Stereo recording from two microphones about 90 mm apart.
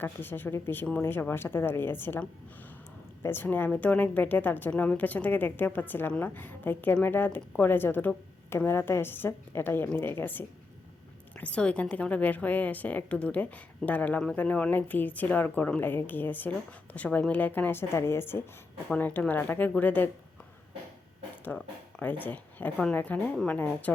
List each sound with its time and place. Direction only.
0.0 s speech: 25° left (ahead or behind)
3.2 s a woman's voice: 25° left (ahead or behind)
21.5 s a woman's voice: 15° left (ahead or behind)